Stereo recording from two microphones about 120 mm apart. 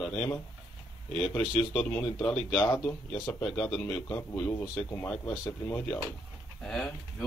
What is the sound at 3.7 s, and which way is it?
Speech, 10° left (ahead or behind).